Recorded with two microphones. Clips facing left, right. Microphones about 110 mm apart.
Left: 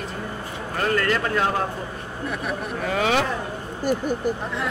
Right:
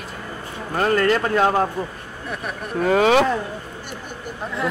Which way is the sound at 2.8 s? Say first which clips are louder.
Right 7 dB; 50° right (ahead or behind).